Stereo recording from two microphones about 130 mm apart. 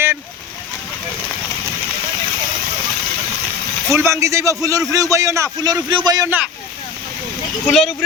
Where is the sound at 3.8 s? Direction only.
20° right (ahead or behind).